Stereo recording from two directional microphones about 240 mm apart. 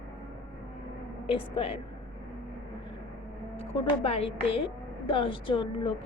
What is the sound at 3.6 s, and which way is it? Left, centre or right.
A woman's voice, left.